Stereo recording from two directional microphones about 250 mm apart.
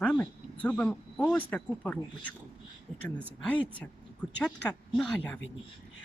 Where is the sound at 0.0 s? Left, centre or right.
Centre.